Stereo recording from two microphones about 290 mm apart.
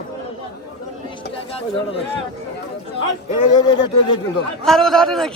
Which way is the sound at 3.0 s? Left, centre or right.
Centre.